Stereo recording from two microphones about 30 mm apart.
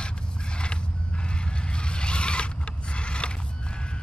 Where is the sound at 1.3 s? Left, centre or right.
Left.